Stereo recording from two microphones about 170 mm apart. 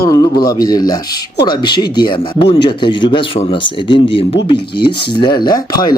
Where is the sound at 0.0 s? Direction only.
20° left (ahead or behind).